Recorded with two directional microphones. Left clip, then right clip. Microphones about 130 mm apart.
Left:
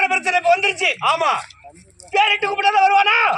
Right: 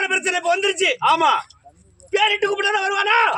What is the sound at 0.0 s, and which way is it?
A man's voice, 35° right (ahead or behind).